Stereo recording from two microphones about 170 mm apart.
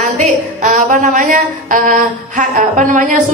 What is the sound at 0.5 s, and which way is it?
A woman's voice, 45° right (ahead or behind).